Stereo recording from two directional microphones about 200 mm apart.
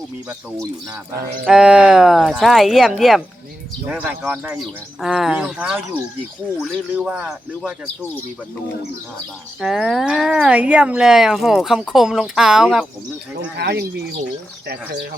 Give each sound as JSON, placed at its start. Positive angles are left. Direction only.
{"t": 0.3, "sound": "speech", "side_deg": -15}
{"t": 9.6, "sound": "speech", "side_deg": -5}
{"t": 13.6, "sound": "speech", "side_deg": -55}